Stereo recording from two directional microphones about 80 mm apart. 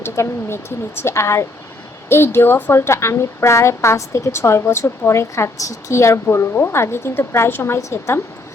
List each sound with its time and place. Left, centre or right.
0.0 s a woman's voice: left